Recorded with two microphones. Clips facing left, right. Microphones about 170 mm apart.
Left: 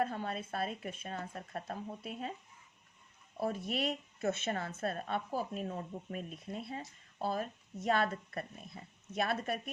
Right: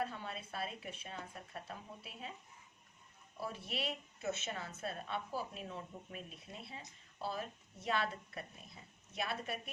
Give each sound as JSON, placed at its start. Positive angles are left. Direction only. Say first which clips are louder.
{"t": 0.0, "sound": "a woman's voice", "louder": "left 6 dB", "side_deg": 50}
{"t": 3.4, "sound": "a woman's voice", "louder": "left 7 dB", "side_deg": 50}